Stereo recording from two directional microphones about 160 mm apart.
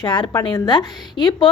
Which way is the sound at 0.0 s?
25° left (ahead or behind).